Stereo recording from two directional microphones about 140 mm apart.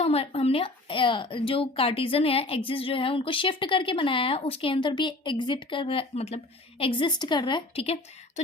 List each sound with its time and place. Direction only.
0.0 s a woman's voice: 45° left (ahead or behind)